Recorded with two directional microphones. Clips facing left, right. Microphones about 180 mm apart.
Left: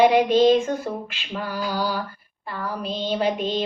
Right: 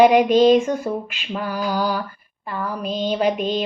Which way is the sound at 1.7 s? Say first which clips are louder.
Right 4 dB; 15° right (ahead or behind).